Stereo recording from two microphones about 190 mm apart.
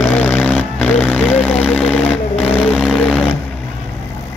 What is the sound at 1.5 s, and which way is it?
Vehicle, 10° left (ahead or behind).